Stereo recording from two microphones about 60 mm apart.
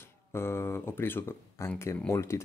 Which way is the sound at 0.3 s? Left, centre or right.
Left.